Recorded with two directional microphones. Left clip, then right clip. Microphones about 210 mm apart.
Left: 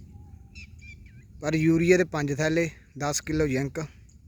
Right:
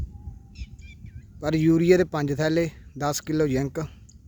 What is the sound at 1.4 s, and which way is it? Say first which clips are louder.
A man's voice: right 2 dB; 5° right (ahead or behind).